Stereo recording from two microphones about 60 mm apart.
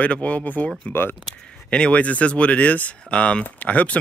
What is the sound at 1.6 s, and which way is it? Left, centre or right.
Speech, centre.